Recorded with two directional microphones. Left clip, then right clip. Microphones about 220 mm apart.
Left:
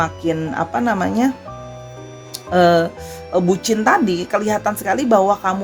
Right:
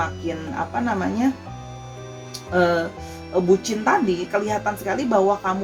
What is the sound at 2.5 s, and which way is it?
A woman's voice, 45° left (ahead or behind).